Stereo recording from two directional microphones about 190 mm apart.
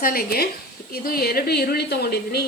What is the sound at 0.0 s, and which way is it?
A woman's voice, 50° left (ahead or behind).